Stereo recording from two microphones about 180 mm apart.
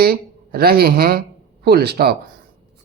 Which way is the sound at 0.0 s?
60° right (ahead or behind).